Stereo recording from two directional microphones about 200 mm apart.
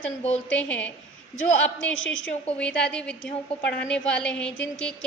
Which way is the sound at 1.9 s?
75° left (ahead or behind).